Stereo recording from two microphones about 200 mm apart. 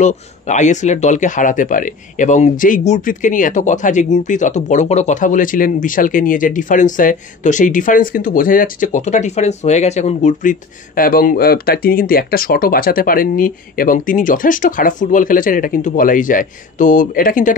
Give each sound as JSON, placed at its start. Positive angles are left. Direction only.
{"t": 0.0, "sound": "speech", "side_deg": 35}